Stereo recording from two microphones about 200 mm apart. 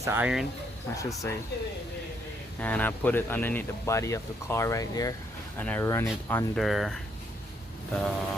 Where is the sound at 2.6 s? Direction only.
5° left (ahead or behind).